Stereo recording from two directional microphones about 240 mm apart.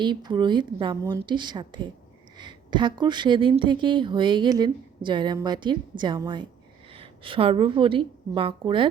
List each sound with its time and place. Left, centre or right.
0.0 s a woman's voice: centre